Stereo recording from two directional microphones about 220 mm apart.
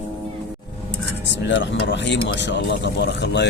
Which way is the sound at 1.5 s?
55° left (ahead or behind).